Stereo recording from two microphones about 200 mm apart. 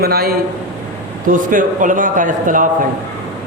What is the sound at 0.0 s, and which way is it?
A man's voice, 50° right (ahead or behind).